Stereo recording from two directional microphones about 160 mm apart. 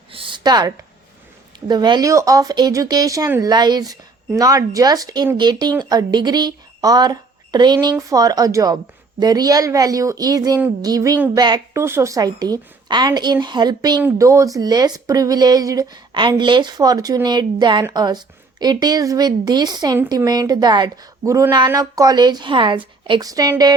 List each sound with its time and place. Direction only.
0.1 s a sound: 35° right (ahead or behind)
1.6 s speech: 25° right (ahead or behind)
3.5 s speech: 25° right (ahead or behind)